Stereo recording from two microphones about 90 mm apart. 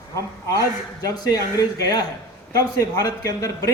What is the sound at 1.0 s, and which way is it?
Speech, 40° left (ahead or behind).